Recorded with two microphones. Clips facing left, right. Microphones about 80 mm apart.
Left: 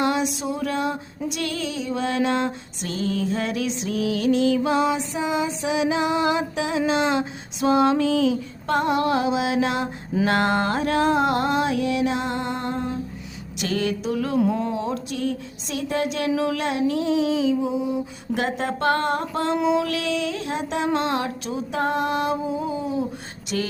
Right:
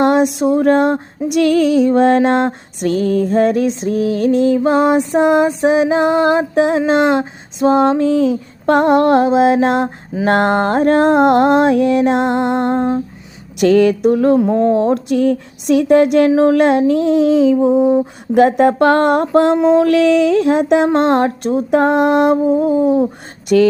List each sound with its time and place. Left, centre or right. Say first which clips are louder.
0.0 s female singing: right 10 dB; right
7.6 s female singing: right 7 dB; right
8.6 s female singing: right 10 dB; right
14.3 s speech: right 7 dB; right
14.6 s female singing: right 13 dB; right
14.9 s speech: right 12 dB; right
16.3 s female singing: right 12 dB; right
19.2 s speech: right 13 dB; right
19.6 s female singing: right 12 dB; right